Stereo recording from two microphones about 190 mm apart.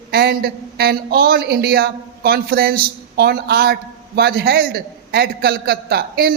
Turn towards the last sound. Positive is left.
turn(degrees=-55)  # may be behind; listen again after turning